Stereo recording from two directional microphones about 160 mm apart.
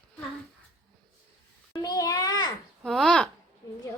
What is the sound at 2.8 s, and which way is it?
Speech, 5° left (ahead or behind).